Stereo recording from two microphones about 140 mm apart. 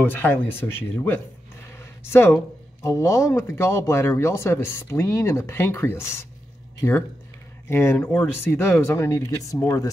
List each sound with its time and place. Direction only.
0.0 s speech: 15° left (ahead or behind)